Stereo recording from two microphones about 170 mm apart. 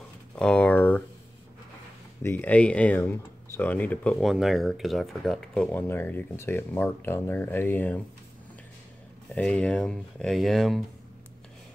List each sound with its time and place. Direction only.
0.4 s a sound: 5° left (ahead or behind)
2.2 s speech: 10° left (ahead or behind)
9.3 s speech: 5° left (ahead or behind)